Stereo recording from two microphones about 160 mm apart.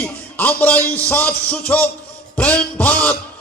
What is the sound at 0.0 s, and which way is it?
A man's voice, 10° left (ahead or behind).